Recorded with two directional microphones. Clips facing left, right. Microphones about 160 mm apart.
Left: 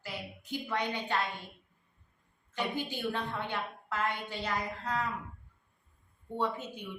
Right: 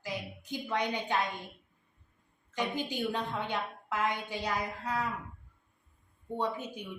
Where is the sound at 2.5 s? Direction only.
15° right (ahead or behind).